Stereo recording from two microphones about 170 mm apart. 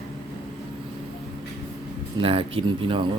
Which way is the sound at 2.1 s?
35° right (ahead or behind).